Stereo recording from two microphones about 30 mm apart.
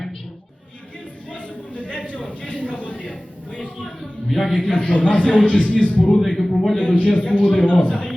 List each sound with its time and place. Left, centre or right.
1.3 s a sound: left
2.5 s a man's voice: left
4.3 s a man's voice: centre
4.7 s a man's voice: left
6.1 s a man's voice: centre
6.7 s a man's voice: left